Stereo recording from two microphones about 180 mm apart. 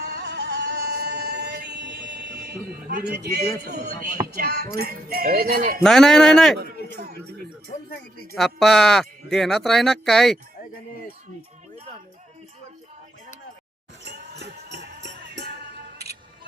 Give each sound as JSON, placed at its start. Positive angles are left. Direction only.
{"t": 0.0, "sound": "music", "side_deg": -65}
{"t": 4.4, "sound": "speech", "side_deg": -60}
{"t": 5.8, "sound": "speech", "side_deg": 5}
{"t": 8.4, "sound": "speech", "side_deg": 0}
{"t": 14.0, "sound": "music", "side_deg": -65}